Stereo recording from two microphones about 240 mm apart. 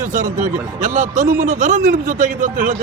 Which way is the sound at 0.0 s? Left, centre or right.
Right.